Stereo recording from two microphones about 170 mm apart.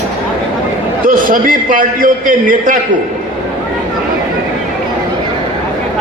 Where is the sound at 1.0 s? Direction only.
55° right (ahead or behind).